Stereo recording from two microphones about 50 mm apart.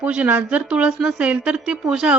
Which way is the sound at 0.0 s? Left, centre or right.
Right.